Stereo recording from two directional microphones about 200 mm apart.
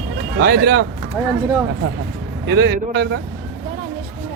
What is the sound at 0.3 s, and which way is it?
Speech, 55° right (ahead or behind).